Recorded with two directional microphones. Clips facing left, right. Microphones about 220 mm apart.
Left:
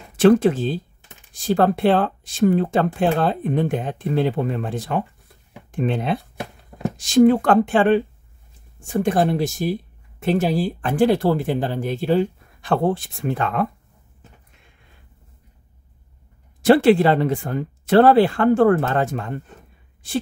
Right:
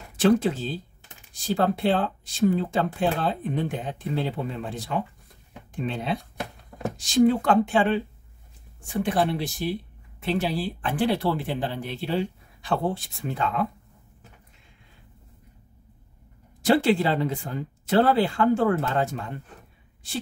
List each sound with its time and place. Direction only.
0.2 s speech: 55° left (ahead or behind)
6.7 s a sound: 20° left (ahead or behind)
7.2 s speech: 55° left (ahead or behind)
8.8 s speech: 45° left (ahead or behind)
16.6 s speech: 60° left (ahead or behind)